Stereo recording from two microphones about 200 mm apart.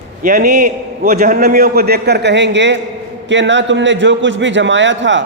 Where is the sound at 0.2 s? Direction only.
50° right (ahead or behind).